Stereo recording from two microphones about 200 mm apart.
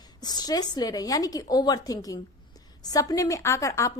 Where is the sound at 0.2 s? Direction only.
20° left (ahead or behind).